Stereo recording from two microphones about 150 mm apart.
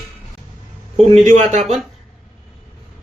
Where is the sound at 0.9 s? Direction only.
40° right (ahead or behind).